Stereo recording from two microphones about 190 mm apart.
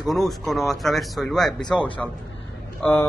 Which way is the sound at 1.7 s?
25° left (ahead or behind).